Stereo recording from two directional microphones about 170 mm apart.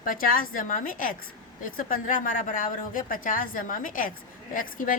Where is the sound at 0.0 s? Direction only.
55° left (ahead or behind).